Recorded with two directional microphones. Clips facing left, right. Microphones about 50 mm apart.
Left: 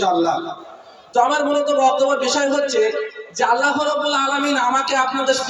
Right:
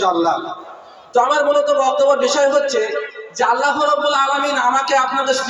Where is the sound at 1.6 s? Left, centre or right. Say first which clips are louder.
Right 2 dB; right.